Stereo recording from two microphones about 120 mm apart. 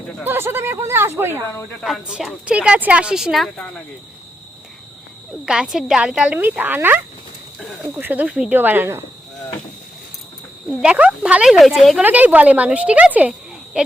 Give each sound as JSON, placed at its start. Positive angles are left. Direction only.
{"t": 0.3, "sound": "speech", "side_deg": -20}
{"t": 1.8, "sound": "speech", "side_deg": -5}
{"t": 5.5, "sound": "speech", "side_deg": -5}
{"t": 10.7, "sound": "speech", "side_deg": -5}
{"t": 12.0, "sound": "speech", "side_deg": -15}